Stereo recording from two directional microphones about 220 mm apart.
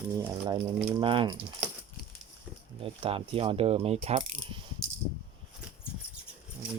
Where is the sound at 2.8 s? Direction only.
25° right (ahead or behind).